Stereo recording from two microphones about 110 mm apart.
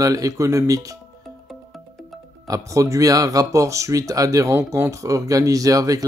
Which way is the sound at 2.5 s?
30° right (ahead or behind).